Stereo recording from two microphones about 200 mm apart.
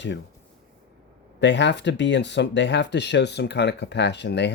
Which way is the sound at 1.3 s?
60° left (ahead or behind).